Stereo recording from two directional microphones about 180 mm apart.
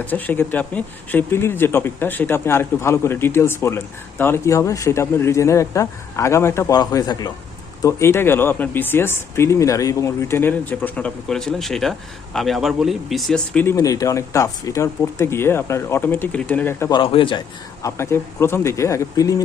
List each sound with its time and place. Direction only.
0.1 s speech: 10° left (ahead or behind)
16.9 s a man's voice: 30° left (ahead or behind)
17.8 s speech: 15° left (ahead or behind)